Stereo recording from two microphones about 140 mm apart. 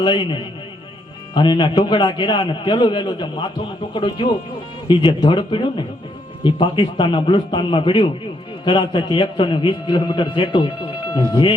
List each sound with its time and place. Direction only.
0.0 s a man's voice: 30° left (ahead or behind)